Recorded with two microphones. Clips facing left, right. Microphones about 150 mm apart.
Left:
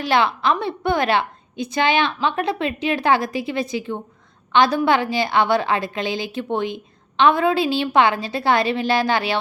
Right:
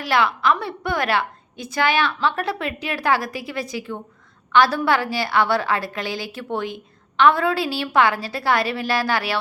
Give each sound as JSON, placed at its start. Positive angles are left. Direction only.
{"t": 0.0, "sound": "a woman's voice", "side_deg": 25}